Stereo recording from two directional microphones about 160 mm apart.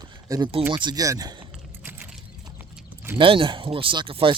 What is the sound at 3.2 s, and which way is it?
Speech, 30° right (ahead or behind).